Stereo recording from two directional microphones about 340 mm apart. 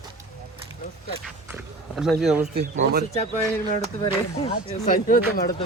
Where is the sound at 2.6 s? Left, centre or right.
Right.